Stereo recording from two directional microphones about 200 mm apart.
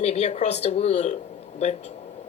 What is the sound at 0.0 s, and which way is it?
A woman's voice, 35° left (ahead or behind).